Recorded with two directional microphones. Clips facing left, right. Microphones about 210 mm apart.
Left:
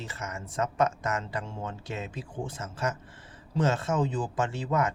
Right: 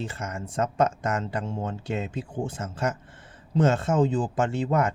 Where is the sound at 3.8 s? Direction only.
25° right (ahead or behind).